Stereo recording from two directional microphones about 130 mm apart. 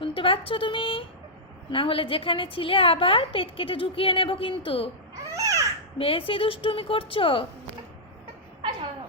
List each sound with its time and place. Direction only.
0.0 s a woman's voice: 45° left (ahead or behind)
5.3 s babbling: 25° right (ahead or behind)
6.0 s a woman's voice: 45° left (ahead or behind)